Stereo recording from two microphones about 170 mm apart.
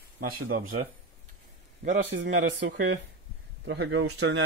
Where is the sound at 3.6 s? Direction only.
90° right.